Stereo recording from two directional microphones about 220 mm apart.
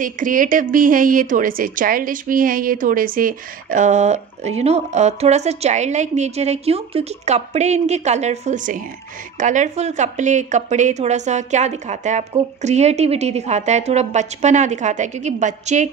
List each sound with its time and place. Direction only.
0.0 s a woman's voice: 40° right (ahead or behind)